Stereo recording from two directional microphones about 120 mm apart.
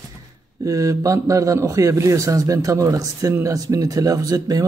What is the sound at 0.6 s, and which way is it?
Speech, 25° right (ahead or behind).